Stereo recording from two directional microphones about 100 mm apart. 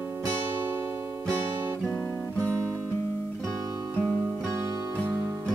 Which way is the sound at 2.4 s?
30° right (ahead or behind).